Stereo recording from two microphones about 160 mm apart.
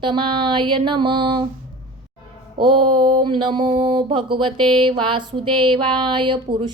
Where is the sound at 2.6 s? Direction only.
30° right (ahead or behind).